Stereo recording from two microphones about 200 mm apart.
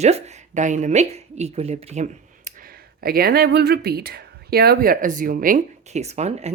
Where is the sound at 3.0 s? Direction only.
50° right (ahead or behind).